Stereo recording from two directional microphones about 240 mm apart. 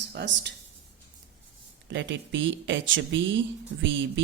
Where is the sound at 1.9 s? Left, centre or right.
Right.